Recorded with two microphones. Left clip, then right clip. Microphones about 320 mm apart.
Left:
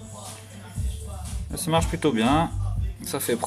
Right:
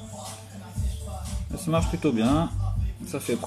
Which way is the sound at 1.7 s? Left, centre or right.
Left.